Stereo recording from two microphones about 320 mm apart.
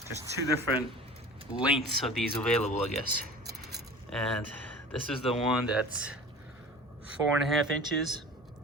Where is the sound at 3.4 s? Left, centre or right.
Centre.